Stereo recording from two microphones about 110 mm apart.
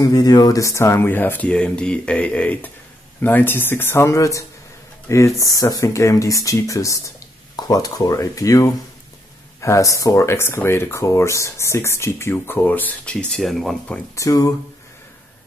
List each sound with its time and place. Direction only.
0.0 s speech: 35° left (ahead or behind); by 13.7 s centre (ahead or behind)
14.1 s speech: 30° left (ahead or behind)